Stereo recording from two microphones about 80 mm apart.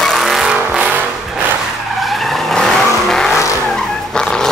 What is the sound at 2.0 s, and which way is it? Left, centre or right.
Vehicle, centre.